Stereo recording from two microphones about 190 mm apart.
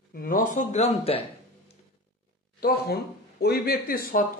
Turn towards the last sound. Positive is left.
turn(degrees=50)  # may be behind; listen again after turning